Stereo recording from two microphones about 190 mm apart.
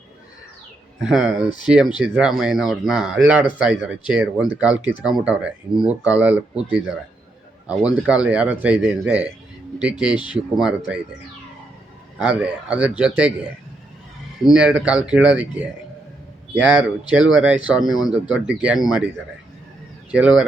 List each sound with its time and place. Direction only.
1.0 s speech: 5° right (ahead or behind)
10.6 s speech: 5° right (ahead or behind)
12.2 s speech: 5° right (ahead or behind)
14.4 s speech: 5° right (ahead or behind)
20.1 s speech: 5° right (ahead or behind)